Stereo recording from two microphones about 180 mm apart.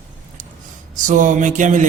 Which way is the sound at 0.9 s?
45° right (ahead or behind).